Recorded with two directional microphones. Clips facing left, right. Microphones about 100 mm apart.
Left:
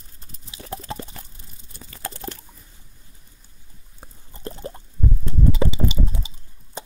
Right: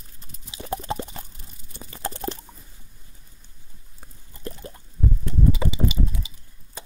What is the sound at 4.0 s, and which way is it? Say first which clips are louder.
Plop: left 1 dB; 30° left (ahead or behind).